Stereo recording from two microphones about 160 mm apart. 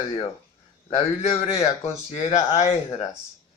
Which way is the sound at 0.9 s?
40° left (ahead or behind).